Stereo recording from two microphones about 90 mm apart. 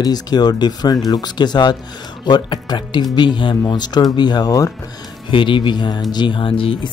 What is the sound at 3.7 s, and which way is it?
Speech, 50° left (ahead or behind).